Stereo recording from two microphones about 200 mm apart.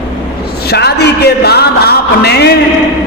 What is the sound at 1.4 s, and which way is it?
Music, 55° left (ahead or behind).